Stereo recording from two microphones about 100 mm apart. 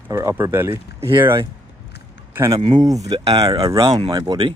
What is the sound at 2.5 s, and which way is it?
Speech, 35° right (ahead or behind).